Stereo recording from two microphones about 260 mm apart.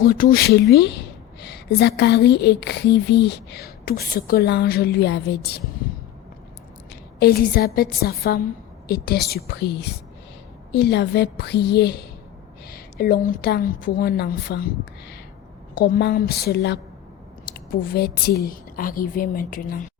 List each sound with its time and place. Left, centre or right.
0.0 s a woman's voice: left
7.2 s a woman's voice: left
15.7 s a woman's voice: left